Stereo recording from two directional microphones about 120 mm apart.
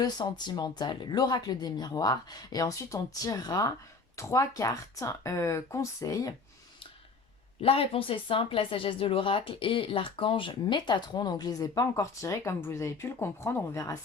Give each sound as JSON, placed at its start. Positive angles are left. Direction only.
{"t": 0.0, "sound": "speech", "side_deg": 35}
{"t": 7.6, "sound": "speech", "side_deg": 50}